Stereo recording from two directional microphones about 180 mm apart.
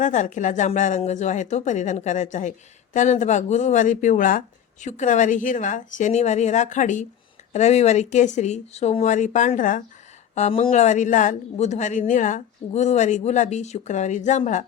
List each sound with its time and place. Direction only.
0.0 s speech: 45° left (ahead or behind)
10.3 s speech: 35° left (ahead or behind)